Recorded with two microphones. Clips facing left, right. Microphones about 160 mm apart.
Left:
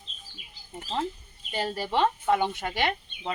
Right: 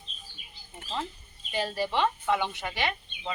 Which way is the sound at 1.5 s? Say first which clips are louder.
Left 1 dB; 45° left (ahead or behind).